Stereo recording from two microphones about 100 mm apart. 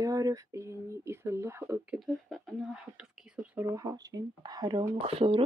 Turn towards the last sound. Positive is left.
turn(degrees=-65)  # may be behind; listen again after turning